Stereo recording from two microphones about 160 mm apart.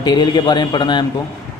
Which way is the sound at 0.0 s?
25° left (ahead or behind).